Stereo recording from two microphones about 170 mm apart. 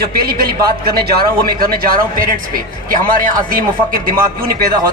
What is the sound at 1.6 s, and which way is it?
Speech, 60° right (ahead or behind).